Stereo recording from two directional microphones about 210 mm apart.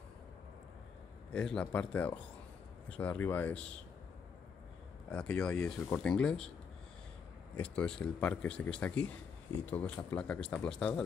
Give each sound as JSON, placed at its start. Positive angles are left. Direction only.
{"t": 1.3, "sound": "speech", "side_deg": 5}
{"t": 5.1, "sound": "speech", "side_deg": 5}
{"t": 7.5, "sound": "speech", "side_deg": 5}